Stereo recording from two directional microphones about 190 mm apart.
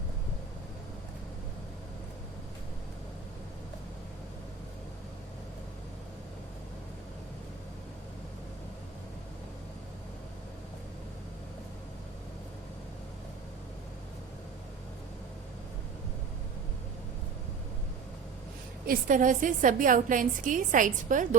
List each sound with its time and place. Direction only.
18.9 s a woman's voice: 45° right (ahead or behind)